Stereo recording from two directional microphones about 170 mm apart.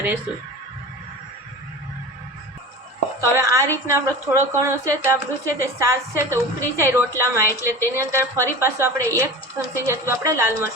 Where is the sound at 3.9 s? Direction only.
15° right (ahead or behind).